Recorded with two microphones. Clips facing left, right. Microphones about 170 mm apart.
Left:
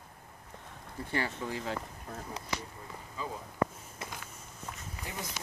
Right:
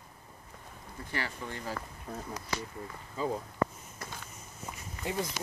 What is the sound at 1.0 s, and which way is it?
Speech, 25° left (ahead or behind).